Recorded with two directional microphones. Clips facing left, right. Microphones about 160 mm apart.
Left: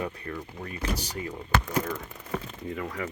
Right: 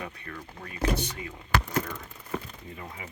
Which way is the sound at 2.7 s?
80° left.